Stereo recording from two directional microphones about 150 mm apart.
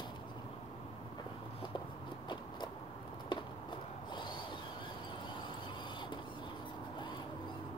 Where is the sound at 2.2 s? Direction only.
30° left (ahead or behind).